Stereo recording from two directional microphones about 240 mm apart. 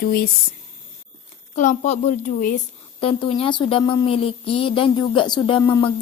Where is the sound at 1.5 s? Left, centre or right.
Left.